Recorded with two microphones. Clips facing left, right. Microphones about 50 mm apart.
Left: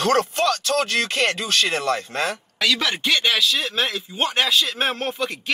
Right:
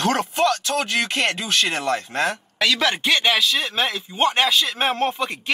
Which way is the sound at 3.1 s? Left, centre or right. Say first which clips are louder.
Left 1 dB; right.